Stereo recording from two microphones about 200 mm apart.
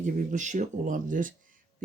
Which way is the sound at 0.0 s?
40° right (ahead or behind).